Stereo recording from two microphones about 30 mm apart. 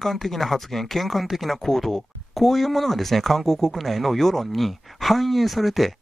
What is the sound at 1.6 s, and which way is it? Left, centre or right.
Speech, centre.